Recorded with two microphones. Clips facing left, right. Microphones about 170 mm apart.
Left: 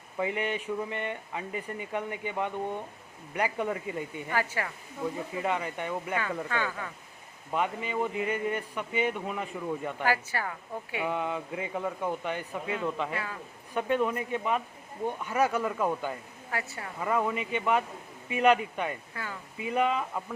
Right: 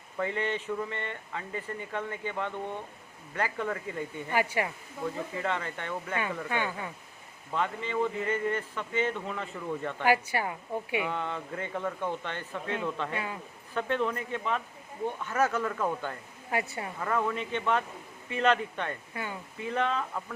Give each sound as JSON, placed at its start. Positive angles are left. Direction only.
{"t": 0.2, "sound": "speech", "side_deg": 15}
{"t": 4.3, "sound": "speech", "side_deg": -15}
{"t": 5.4, "sound": "speech", "side_deg": 10}
{"t": 6.1, "sound": "a woman's voice", "side_deg": -20}
{"t": 7.5, "sound": "speech", "side_deg": 15}
{"t": 10.0, "sound": "a woman's voice", "side_deg": -20}
{"t": 11.1, "sound": "speech", "side_deg": 10}
{"t": 13.1, "sound": "a woman's voice", "side_deg": -20}
{"t": 13.7, "sound": "speech", "side_deg": 10}
{"t": 16.5, "sound": "a woman's voice", "side_deg": -20}
{"t": 17.0, "sound": "speech", "side_deg": 10}
{"t": 19.1, "sound": "a woman's voice", "side_deg": -20}
{"t": 19.5, "sound": "speech", "side_deg": 10}